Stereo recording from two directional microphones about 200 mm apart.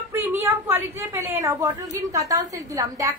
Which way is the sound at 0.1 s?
10° right (ahead or behind).